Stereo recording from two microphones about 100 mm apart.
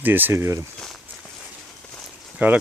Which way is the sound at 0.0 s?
20° right (ahead or behind).